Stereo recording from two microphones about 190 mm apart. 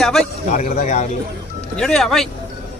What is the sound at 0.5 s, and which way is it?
Speech, 40° left (ahead or behind).